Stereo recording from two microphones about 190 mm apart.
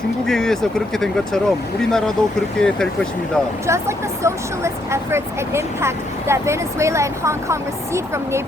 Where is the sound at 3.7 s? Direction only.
15° right (ahead or behind).